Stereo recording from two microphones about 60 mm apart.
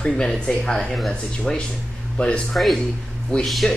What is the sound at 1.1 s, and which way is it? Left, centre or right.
Speech, centre.